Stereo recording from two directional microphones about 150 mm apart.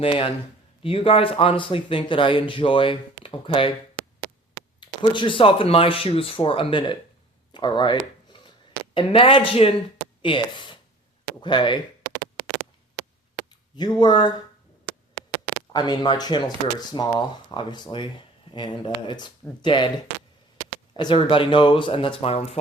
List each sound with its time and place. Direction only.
0.0 s speech: 35° left (ahead or behind)
4.8 s speech: 35° left (ahead or behind)
7.5 s a sound: 30° left (ahead or behind)
9.0 s speech: 35° left (ahead or behind)
13.7 s speech: 30° left (ahead or behind)
15.7 s speech: 25° left (ahead or behind)
20.9 s speech: 30° left (ahead or behind)